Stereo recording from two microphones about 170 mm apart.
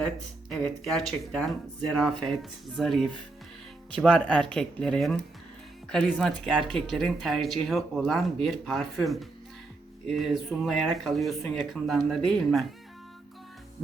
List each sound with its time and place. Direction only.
0.9 s speech: centre (ahead or behind)